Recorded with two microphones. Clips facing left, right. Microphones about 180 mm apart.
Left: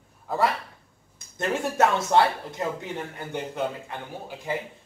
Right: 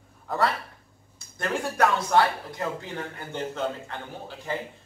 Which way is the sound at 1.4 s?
25° left (ahead or behind).